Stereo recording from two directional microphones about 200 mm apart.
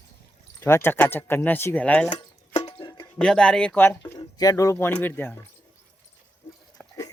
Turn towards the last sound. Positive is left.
turn(degrees=15)  # may be behind; listen again after turning